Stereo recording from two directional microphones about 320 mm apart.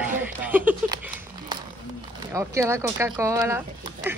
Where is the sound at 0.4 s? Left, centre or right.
Centre.